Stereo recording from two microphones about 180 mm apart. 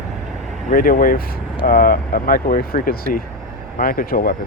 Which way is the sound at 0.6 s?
50° left (ahead or behind).